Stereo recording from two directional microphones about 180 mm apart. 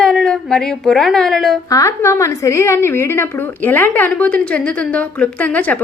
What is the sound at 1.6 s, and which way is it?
A woman's voice, 15° left (ahead or behind).